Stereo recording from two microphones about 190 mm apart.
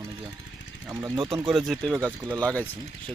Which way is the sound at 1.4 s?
Centre (ahead or behind).